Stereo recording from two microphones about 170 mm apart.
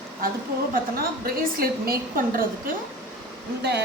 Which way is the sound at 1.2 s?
60° right (ahead or behind).